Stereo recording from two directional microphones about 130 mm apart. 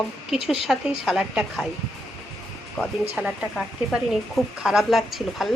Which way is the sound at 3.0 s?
10° right (ahead or behind).